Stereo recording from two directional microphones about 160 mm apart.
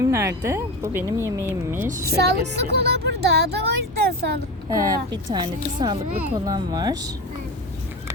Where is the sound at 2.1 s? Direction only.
90° right.